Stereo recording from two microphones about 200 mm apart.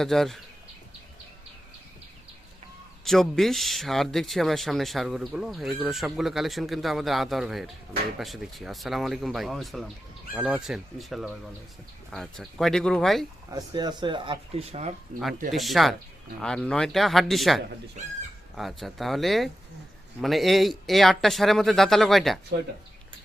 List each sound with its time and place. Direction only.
0.0 s speech: centre (ahead or behind)
3.0 s speech: centre (ahead or behind)
13.5 s speech: 20° right (ahead or behind)
15.5 s speech: centre (ahead or behind)